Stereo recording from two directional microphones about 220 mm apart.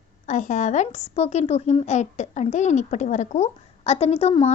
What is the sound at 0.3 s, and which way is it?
A woman's voice, 35° left (ahead or behind).